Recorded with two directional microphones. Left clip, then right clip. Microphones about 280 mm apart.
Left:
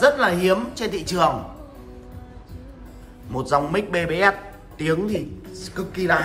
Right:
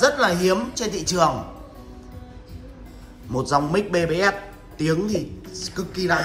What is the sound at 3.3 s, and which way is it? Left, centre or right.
A man's voice, centre.